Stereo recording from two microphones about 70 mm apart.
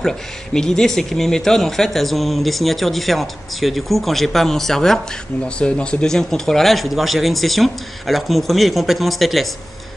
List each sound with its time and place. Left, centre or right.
0.0 s speech: centre